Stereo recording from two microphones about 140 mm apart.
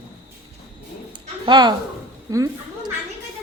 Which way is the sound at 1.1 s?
30° right (ahead or behind).